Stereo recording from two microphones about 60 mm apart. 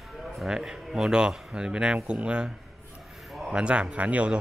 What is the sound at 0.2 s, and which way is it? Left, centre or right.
Speech, centre.